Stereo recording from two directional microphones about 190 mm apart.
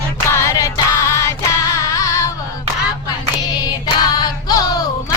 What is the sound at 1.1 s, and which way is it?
Female singing, 15° left (ahead or behind).